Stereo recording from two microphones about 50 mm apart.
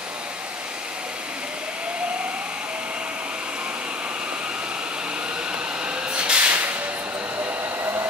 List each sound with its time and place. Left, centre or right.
6.1 s vehicle: right
7.8 s hair dryer: right